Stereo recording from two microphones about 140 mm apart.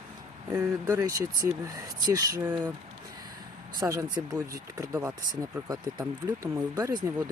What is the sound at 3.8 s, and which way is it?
Speech, 25° right (ahead or behind).